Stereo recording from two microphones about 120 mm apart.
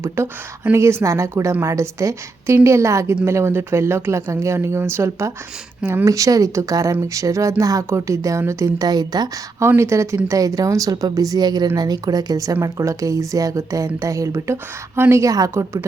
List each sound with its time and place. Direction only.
0.0 s a woman's voice: 20° right (ahead or behind)
9.6 s a woman's voice: 25° right (ahead or behind)